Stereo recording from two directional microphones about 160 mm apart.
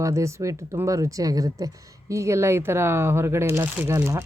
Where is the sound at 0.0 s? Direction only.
20° right (ahead or behind).